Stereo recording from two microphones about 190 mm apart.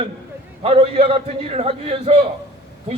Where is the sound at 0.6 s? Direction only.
30° right (ahead or behind).